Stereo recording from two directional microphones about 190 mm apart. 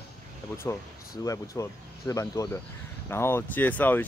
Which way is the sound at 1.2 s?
15° left (ahead or behind).